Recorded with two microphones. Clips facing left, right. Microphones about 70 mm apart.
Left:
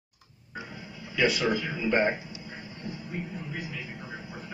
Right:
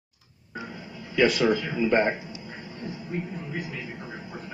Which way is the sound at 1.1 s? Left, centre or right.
Right.